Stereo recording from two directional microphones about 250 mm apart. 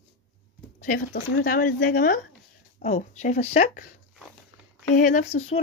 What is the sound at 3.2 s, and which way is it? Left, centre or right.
Speech, left.